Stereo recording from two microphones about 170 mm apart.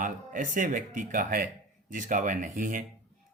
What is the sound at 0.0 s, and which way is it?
Speech, 50° right (ahead or behind).